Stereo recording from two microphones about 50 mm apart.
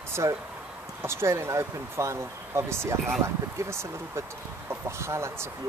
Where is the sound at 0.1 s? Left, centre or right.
Right.